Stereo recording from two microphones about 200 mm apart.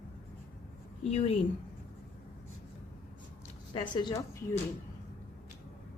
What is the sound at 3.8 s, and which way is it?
Speech, 20° left (ahead or behind).